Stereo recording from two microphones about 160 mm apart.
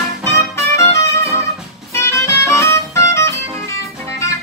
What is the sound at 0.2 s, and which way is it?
Music, 15° left (ahead or behind).